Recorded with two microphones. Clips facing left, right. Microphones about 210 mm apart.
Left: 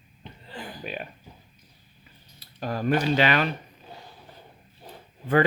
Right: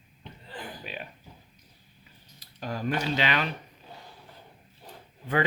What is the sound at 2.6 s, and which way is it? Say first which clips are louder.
Speech: left 5 dB; 50° left (ahead or behind).